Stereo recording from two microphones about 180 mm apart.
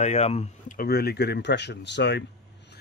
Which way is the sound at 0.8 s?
60° left (ahead or behind).